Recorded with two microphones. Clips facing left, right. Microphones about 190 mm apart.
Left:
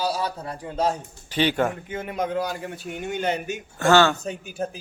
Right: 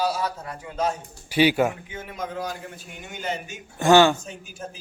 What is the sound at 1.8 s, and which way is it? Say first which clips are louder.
A man's voice: left 6 dB; 55° left (ahead or behind).